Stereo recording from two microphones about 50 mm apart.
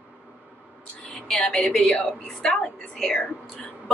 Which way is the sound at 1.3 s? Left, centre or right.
Left.